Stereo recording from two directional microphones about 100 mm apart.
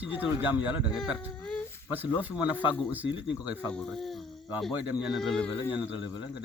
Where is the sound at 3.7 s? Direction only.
10° left (ahead or behind).